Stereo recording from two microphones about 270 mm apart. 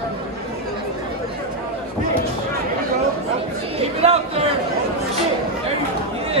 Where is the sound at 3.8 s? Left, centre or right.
Right.